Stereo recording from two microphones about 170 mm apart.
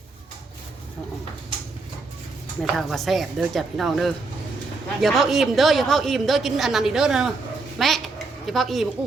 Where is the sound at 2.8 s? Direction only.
Centre (ahead or behind).